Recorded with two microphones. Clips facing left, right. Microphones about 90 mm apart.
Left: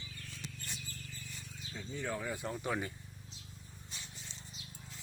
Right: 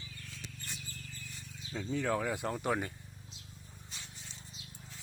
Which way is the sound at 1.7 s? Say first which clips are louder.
Right 7 dB; 90° right.